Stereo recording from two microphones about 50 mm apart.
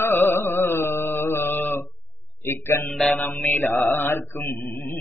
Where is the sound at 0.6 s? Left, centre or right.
Left.